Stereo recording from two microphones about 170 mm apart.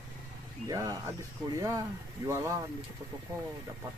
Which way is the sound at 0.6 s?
20° right (ahead or behind).